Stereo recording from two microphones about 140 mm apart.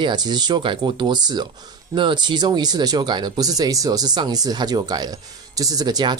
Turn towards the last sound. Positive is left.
turn(degrees=-30)  # may be behind; listen again after turning